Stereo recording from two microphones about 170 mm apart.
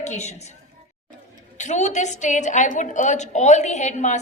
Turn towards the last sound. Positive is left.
turn(degrees=45)  # may be behind; listen again after turning